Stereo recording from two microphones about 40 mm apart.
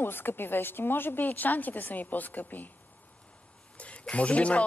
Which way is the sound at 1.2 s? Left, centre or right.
Left.